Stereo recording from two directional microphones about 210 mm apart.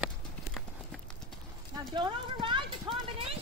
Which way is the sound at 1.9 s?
20° right (ahead or behind).